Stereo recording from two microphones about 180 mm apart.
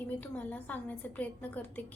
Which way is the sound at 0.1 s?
10° left (ahead or behind).